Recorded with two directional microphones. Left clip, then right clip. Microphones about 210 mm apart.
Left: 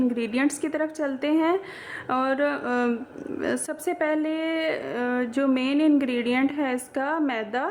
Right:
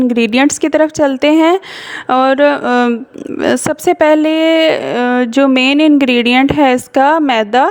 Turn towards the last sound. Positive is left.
turn(degrees=-45)  # may be behind; listen again after turning